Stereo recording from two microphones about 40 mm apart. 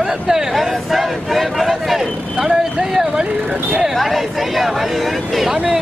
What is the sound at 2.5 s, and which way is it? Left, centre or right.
Vehicle, centre.